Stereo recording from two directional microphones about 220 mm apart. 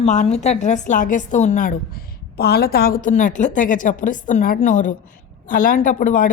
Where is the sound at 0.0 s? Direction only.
30° left (ahead or behind).